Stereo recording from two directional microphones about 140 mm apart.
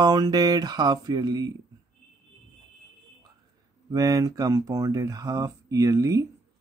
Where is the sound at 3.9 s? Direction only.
25° right (ahead or behind).